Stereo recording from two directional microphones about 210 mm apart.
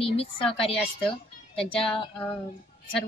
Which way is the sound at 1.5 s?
25° left (ahead or behind).